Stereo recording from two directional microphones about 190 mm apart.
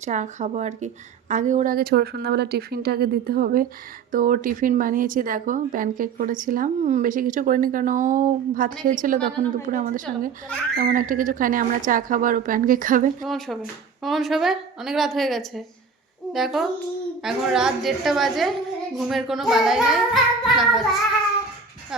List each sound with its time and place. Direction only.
0.0 s speech: 40° right (ahead or behind)
13.2 s a woman's voice: centre (ahead or behind)
20.4 s music: centre (ahead or behind)